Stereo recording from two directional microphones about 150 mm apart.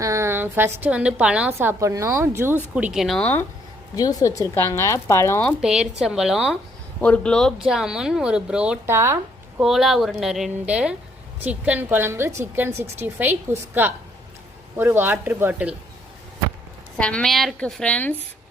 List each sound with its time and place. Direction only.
0.0 s a woman's voice: 20° right (ahead or behind)
1.5 s speech: 20° right (ahead or behind)
2.7 s a woman's voice: 5° right (ahead or behind)
3.9 s speech: 25° left (ahead or behind)
5.6 s a woman's voice: 5° right (ahead or behind)
17.0 s a woman's voice: 5° left (ahead or behind)